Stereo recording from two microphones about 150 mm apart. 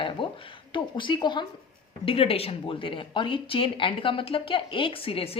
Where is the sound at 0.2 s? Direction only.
35° left (ahead or behind).